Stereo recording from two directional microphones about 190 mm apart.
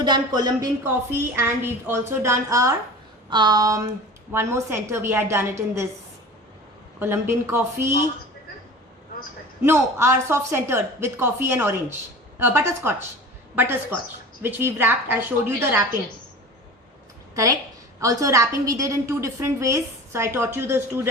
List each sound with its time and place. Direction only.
0.0 s a woman's voice: 20° right (ahead or behind)
7.0 s a woman's voice: 15° right (ahead or behind)
9.6 s a woman's voice: 15° right (ahead or behind)
17.3 s a woman's voice: 15° right (ahead or behind)